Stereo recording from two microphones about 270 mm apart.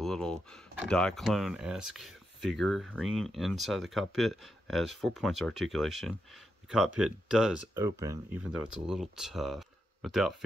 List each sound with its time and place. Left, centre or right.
0.0 s speech: centre